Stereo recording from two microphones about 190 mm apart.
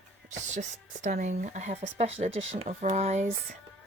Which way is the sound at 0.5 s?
45° right (ahead or behind).